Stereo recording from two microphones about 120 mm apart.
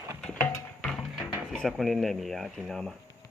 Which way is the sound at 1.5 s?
5° left (ahead or behind).